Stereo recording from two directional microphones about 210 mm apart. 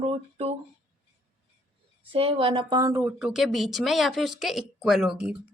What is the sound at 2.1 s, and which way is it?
Speech, 25° right (ahead or behind).